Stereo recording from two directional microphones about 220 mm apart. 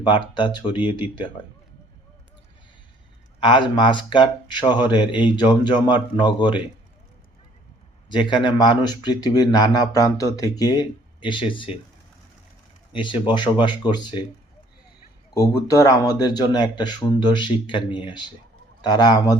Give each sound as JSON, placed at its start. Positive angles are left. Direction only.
{"t": 0.0, "sound": "speech", "side_deg": 20}
{"t": 3.4, "sound": "speech", "side_deg": 20}
{"t": 8.1, "sound": "speech", "side_deg": 20}
{"t": 12.9, "sound": "speech", "side_deg": 20}
{"t": 15.4, "sound": "speech", "side_deg": 15}